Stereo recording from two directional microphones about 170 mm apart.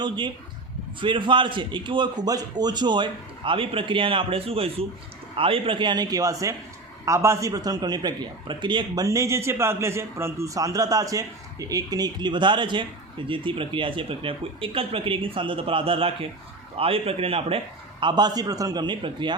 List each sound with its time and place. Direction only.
0.9 s a man's voice: 30° right (ahead or behind)